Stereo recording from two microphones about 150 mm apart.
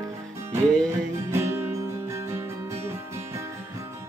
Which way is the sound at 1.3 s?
15° right (ahead or behind).